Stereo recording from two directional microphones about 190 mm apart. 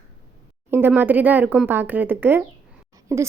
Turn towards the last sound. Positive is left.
turn(degrees=-15)  # may be behind; listen again after turning